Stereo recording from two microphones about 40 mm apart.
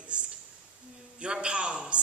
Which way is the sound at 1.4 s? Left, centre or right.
Right.